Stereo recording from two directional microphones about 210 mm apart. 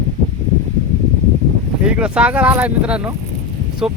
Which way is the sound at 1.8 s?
5° right (ahead or behind).